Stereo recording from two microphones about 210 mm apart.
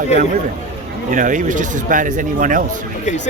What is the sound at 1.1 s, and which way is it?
Speech, 40° right (ahead or behind).